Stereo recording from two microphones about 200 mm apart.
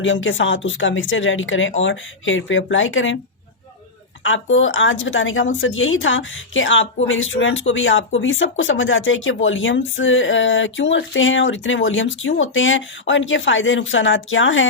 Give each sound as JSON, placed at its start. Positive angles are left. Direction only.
{"t": 0.0, "sound": "speech", "side_deg": 70}
{"t": 4.2, "sound": "speech", "side_deg": 75}